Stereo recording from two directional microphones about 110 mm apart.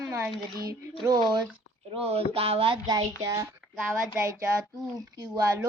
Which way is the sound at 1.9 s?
60° right (ahead or behind).